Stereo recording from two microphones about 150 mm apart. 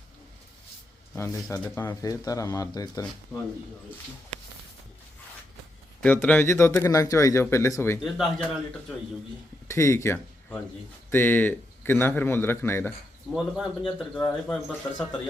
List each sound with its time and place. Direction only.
1.1 s speech: 20° left (ahead or behind)
6.0 s speech: 10° left (ahead or behind)
8.0 s a man's voice: centre (ahead or behind)
9.6 s speech: 20° left (ahead or behind)
13.3 s a man's voice: centre (ahead or behind)